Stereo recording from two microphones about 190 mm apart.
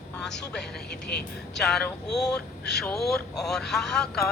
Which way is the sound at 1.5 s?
5° left (ahead or behind).